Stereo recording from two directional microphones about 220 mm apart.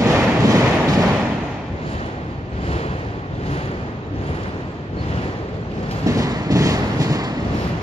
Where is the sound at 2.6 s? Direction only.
30° left (ahead or behind).